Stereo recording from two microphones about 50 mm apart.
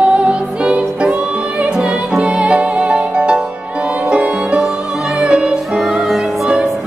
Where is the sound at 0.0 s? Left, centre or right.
Right.